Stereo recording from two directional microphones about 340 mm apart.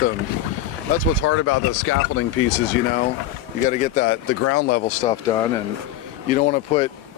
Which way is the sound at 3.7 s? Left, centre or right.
Left.